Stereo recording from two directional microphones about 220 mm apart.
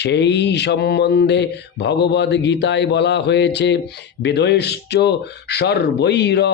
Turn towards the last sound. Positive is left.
turn(degrees=50)  # may be behind; listen again after turning